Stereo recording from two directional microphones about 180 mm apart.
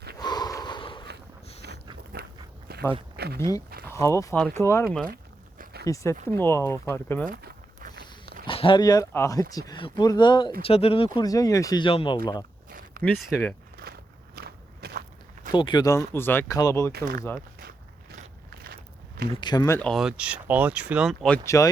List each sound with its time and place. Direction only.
0.2 s snort: 20° left (ahead or behind)
1.6 s walk: 65° right (ahead or behind)
3.2 s a sound: 60° right (ahead or behind)
3.8 s speech: 15° left (ahead or behind)
5.0 s a sound: 55° right (ahead or behind)
5.8 s speech: 15° left (ahead or behind)
7.3 s a sound: 50° right (ahead or behind)
8.4 s speech: 30° left (ahead or behind)
13.0 s speech: 10° left (ahead or behind)
13.7 s walk: 60° right (ahead or behind)
15.5 s speech: 25° left (ahead or behind)
18.5 s walk: 60° right (ahead or behind)
19.4 s speech: 25° left (ahead or behind)
19.9 s speech: 5° right (ahead or behind); by 21.7 s 15° left (ahead or behind)